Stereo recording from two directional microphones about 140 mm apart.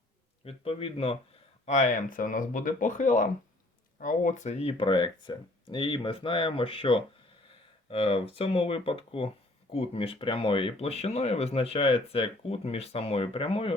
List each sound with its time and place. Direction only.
0.4 s speech: 45° left (ahead or behind)
1.6 s speech: 60° left (ahead or behind); by 13.7 s 40° left (ahead or behind)